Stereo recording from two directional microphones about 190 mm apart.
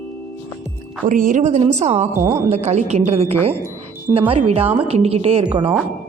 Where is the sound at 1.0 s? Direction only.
45° right (ahead or behind).